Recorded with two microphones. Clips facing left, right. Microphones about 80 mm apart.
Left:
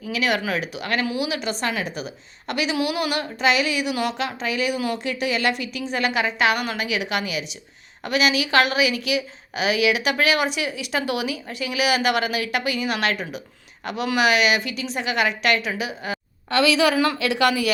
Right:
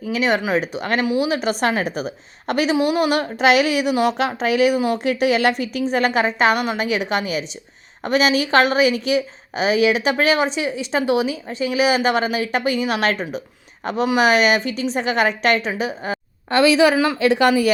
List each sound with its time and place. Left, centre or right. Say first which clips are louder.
0.1 s a woman's voice: right 4 dB; right
2.7 s a woman's voice: right 6 dB; right